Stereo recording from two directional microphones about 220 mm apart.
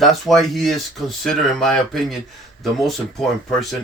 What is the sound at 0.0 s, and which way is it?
Speech, centre (ahead or behind).